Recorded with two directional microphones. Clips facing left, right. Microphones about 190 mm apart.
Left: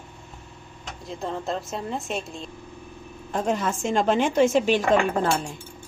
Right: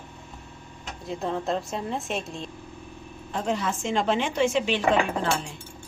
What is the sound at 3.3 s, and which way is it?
A woman's voice, 50° left (ahead or behind).